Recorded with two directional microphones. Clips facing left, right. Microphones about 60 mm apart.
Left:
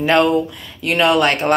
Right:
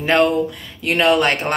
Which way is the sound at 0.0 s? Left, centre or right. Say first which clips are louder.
Left 1 dB; right.